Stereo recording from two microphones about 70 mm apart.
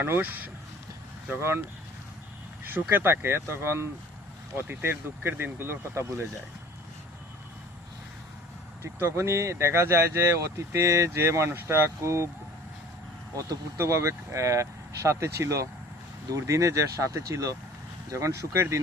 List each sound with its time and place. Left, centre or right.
0.0 s speech: right
1.4 s speech: right
2.6 s speech: right
8.8 s speech: right
13.7 s speech: right